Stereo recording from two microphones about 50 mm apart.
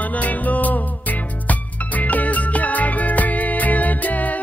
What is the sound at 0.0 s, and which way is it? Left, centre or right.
Music, left.